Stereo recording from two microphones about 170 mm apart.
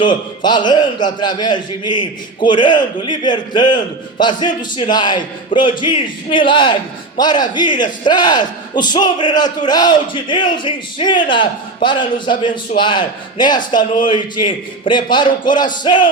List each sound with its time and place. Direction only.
0.0 s a man's voice: 25° left (ahead or behind)